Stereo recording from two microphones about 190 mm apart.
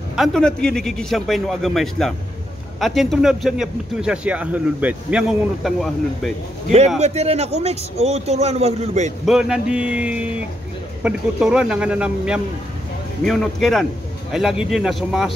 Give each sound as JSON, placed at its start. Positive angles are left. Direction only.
{"t": 0.1, "sound": "speech", "side_deg": 0}
{"t": 7.0, "sound": "speech", "side_deg": -35}
{"t": 9.2, "sound": "speech", "side_deg": -5}